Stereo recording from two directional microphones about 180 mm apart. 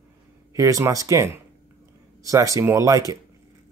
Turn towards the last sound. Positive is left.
turn(degrees=-20)  # may be behind; listen again after turning